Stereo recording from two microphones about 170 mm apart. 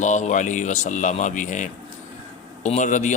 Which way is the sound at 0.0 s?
45° left (ahead or behind).